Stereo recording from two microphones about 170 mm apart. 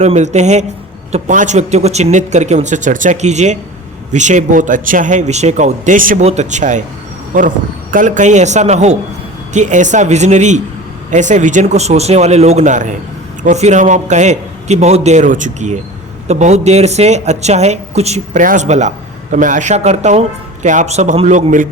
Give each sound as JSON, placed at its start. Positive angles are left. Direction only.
{"t": 0.0, "sound": "a man's voice", "side_deg": -40}